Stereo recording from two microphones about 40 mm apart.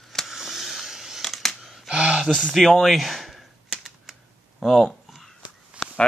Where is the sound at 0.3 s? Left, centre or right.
Centre.